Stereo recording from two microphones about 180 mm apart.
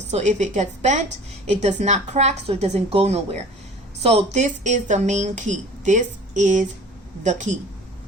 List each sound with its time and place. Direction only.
0.1 s a woman's voice: 40° right (ahead or behind)